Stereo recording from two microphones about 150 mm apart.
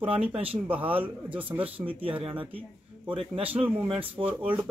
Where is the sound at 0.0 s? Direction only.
40° right (ahead or behind).